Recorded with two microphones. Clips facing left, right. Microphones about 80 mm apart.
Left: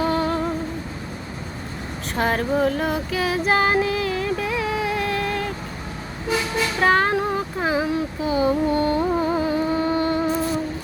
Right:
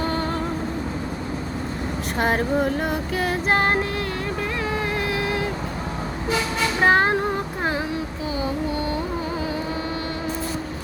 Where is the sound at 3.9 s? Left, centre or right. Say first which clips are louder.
Left 3 dB; centre.